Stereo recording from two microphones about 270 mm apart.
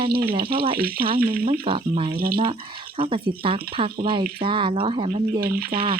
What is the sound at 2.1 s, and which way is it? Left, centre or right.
Speech, right.